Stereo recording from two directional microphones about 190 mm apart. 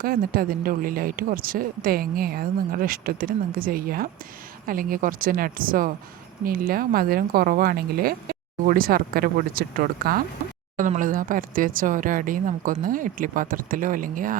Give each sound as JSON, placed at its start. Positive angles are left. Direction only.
{"t": 0.0, "sound": "speech", "side_deg": -50}